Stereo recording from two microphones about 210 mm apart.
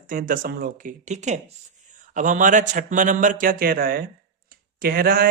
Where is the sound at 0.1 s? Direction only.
40° right (ahead or behind).